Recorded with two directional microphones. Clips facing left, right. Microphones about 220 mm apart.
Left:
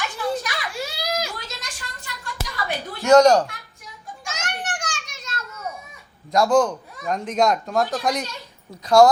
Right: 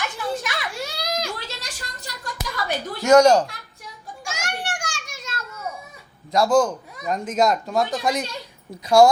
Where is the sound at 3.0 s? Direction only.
15° right (ahead or behind).